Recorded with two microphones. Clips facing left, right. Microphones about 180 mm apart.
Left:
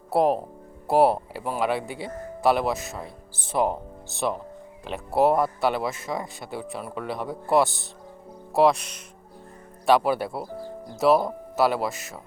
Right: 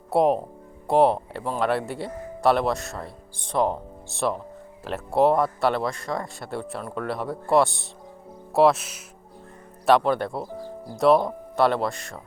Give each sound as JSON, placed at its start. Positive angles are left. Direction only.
{"t": 0.1, "sound": "speech", "side_deg": 0}